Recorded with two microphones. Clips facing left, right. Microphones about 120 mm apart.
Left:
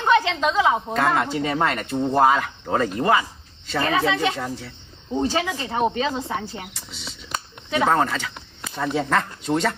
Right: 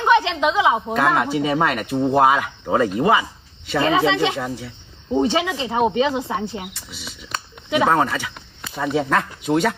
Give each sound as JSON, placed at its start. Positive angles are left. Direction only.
{"t": 0.0, "sound": "a woman's voice", "side_deg": -10}
{"t": 3.8, "sound": "speech", "side_deg": -25}
{"t": 4.4, "sound": "speech", "side_deg": -5}
{"t": 5.1, "sound": "speech", "side_deg": -20}
{"t": 5.4, "sound": "a woman's voice", "side_deg": -10}